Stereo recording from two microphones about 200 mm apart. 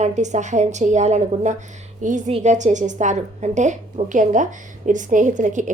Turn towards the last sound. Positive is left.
turn(degrees=-40)  # may be behind; listen again after turning